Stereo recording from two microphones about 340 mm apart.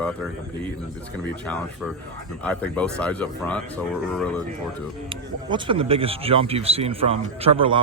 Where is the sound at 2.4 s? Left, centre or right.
Centre.